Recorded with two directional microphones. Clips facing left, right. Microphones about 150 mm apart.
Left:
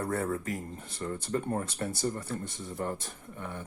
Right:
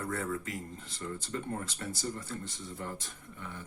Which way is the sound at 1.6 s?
55° left (ahead or behind).